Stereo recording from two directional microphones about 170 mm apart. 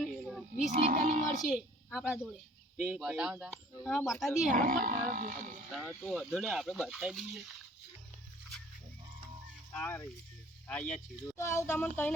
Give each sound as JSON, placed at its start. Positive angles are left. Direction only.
{"t": 0.0, "sound": "roaring cats", "side_deg": 0}
{"t": 0.7, "sound": "speech", "side_deg": -40}
{"t": 1.9, "sound": "speech", "side_deg": -5}
{"t": 4.5, "sound": "speech", "side_deg": -50}
{"t": 5.7, "sound": "speech", "side_deg": 0}
{"t": 9.7, "sound": "speech", "side_deg": 15}
{"t": 11.3, "sound": "speech", "side_deg": 15}